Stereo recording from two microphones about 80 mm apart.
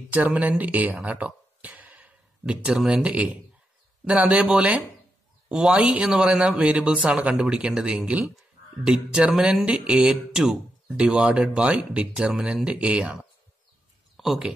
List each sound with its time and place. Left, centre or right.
0.1 s speech: centre
14.1 s speech: centre